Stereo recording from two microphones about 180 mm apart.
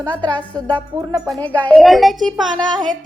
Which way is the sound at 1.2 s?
5° left (ahead or behind).